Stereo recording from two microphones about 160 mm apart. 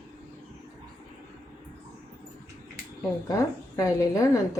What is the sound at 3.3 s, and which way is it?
A woman's voice, 20° left (ahead or behind).